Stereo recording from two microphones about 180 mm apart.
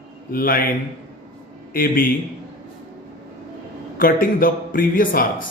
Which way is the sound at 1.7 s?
50° left (ahead or behind).